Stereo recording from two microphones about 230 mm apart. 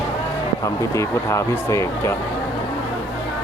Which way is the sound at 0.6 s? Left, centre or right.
Centre.